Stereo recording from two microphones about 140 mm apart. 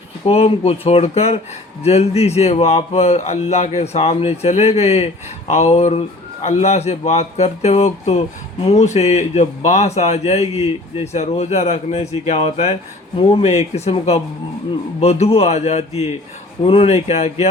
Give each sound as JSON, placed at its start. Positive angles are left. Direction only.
{"t": 0.3, "sound": "speech", "side_deg": 45}